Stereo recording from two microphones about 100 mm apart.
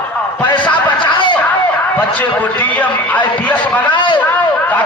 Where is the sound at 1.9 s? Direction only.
15° left (ahead or behind).